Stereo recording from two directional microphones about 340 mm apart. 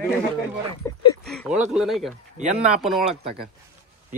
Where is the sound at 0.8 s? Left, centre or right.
Centre.